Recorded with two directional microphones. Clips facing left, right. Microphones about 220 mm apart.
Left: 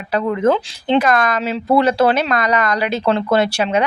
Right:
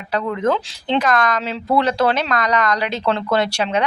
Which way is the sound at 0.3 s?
5° left (ahead or behind).